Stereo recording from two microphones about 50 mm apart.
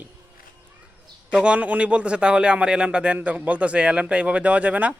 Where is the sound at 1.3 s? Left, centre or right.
Centre.